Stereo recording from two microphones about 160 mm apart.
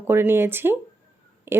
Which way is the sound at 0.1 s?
15° right (ahead or behind).